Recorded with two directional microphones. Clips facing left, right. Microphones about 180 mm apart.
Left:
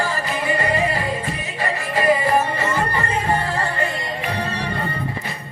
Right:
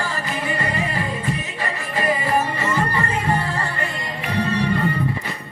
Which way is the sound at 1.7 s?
30° left (ahead or behind).